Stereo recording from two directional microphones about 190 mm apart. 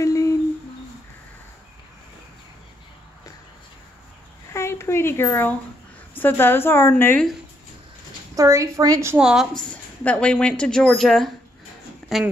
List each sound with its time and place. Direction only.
0.0 s humming: 15° left (ahead or behind)
4.5 s a sound: 15° left (ahead or behind)
6.1 s a woman's voice: 10° left (ahead or behind)
8.4 s a woman's voice: 15° right (ahead or behind); by 12.2 s centre (ahead or behind)